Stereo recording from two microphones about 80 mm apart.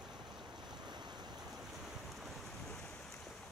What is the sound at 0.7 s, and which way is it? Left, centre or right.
Waves, right.